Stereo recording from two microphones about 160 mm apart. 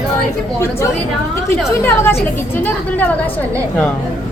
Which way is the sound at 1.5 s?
15° left (ahead or behind).